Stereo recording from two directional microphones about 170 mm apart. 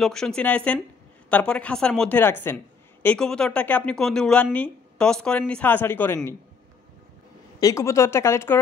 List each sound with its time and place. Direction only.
0.0 s speech: 5° left (ahead or behind)
7.6 s speech: 15° left (ahead or behind)